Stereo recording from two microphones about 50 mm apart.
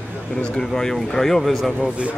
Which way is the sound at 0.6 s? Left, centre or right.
Centre.